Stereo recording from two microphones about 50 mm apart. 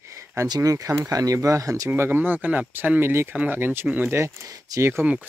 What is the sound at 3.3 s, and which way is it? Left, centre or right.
Speech, right.